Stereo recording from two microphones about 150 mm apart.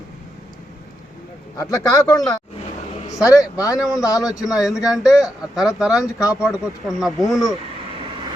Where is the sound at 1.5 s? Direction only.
25° left (ahead or behind).